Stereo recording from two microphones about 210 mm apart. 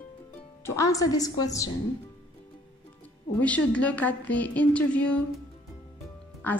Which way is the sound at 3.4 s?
5° left (ahead or behind).